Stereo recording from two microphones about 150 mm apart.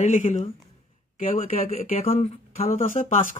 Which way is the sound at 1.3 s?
45° left (ahead or behind).